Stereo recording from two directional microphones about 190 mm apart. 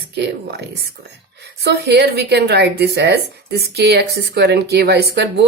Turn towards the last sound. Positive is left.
turn(degrees=-60)  # may be behind; listen again after turning